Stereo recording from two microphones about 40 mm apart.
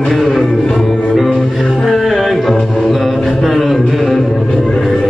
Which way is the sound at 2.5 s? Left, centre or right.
Centre.